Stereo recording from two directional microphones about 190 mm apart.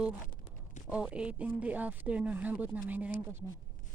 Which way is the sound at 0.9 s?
5° right (ahead or behind).